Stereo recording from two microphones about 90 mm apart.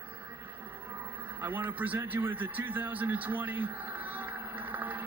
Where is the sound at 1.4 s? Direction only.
25° right (ahead or behind).